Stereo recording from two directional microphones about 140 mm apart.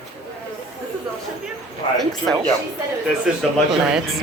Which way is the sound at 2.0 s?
5° left (ahead or behind).